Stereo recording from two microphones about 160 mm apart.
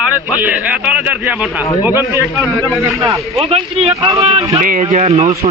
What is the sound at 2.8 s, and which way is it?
Speech, 20° right (ahead or behind).